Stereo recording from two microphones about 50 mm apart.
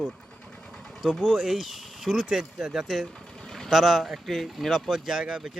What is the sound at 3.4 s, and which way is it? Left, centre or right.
Vehicle, centre.